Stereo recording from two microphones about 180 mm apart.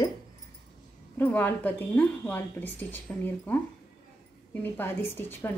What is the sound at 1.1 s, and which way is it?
Speech, 10° left (ahead or behind).